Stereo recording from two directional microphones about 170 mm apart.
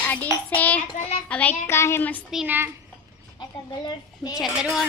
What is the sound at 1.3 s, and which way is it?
Speech, 10° left (ahead or behind).